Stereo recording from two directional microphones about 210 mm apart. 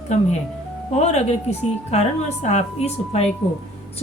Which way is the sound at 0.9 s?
30° left (ahead or behind).